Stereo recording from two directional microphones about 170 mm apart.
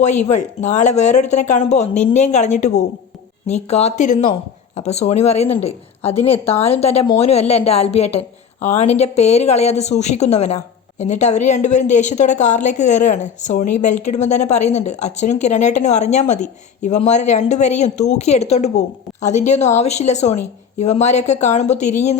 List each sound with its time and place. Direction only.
0.0 s a woman's voice: 45° left (ahead or behind)